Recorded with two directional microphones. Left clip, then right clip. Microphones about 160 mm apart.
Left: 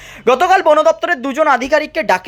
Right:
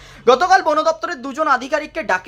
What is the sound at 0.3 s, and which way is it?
Speech, 25° left (ahead or behind).